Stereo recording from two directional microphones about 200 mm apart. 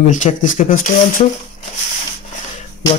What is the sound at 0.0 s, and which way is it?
Speech, 40° left (ahead or behind).